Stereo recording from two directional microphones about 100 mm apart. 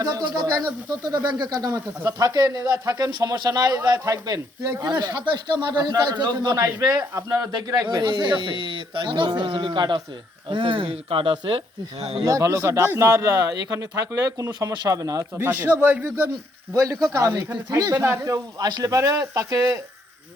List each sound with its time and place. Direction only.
0.0 s speech: 40° right (ahead or behind)
4.9 s a man's voice: 50° right (ahead or behind)
10.5 s speech: 60° right (ahead or behind); by 12.2 s 80° right
12.2 s speech: 30° right (ahead or behind)
15.4 s a man's voice: 20° right (ahead or behind)
16.7 s speech: 35° right (ahead or behind)
17.9 s a man's voice: 25° right (ahead or behind)
18.6 s speech: 40° right (ahead or behind)